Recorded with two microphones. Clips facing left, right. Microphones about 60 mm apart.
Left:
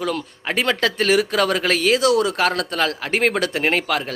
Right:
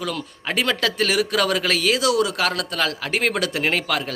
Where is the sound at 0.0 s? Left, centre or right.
Left.